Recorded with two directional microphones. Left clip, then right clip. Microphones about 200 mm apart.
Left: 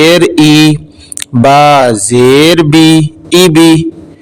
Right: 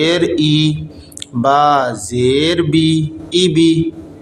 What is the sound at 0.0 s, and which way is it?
A man's voice, 45° left (ahead or behind).